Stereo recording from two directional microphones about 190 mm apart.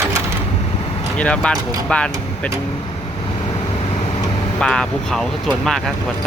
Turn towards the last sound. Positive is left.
turn(degrees=0)  # may be behind; listen again after turning